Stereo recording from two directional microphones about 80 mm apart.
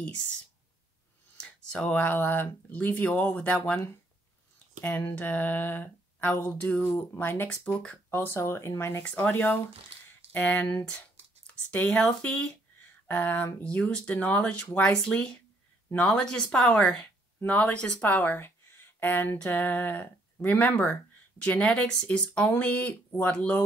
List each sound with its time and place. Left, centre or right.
1.4 s speech: centre
4.8 s speech: centre
8.1 s speech: left
8.4 s speech: left
9.0 s speech: centre
10.6 s speech: left